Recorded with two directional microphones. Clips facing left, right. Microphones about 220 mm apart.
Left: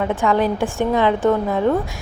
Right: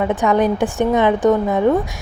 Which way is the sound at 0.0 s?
20° right (ahead or behind).